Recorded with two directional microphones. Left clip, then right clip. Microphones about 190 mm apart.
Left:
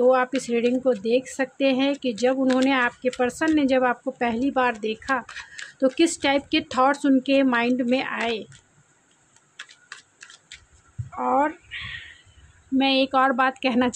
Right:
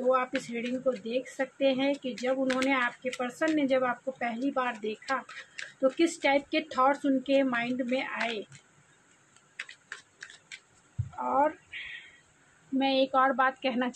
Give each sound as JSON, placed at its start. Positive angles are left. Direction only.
{"t": 0.1, "sound": "speech", "side_deg": 60}
{"t": 9.6, "sound": "tick-tock", "side_deg": 25}
{"t": 11.2, "sound": "a sound", "side_deg": 65}
{"t": 12.7, "sound": "speech", "side_deg": 55}